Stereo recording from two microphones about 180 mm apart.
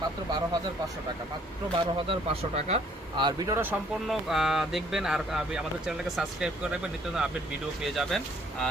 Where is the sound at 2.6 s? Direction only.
35° right (ahead or behind); by 3.8 s 10° right (ahead or behind).